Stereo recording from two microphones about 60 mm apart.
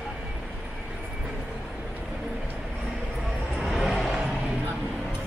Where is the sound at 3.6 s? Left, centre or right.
Centre.